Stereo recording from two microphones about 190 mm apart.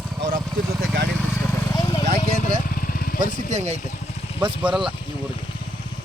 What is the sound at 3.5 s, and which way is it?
Speech, 35° right (ahead or behind).